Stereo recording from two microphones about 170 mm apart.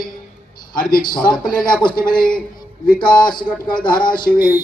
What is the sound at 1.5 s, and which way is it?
Speech, 5° left (ahead or behind).